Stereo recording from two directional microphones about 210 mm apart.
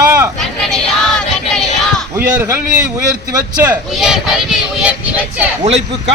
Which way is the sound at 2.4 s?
10° right (ahead or behind).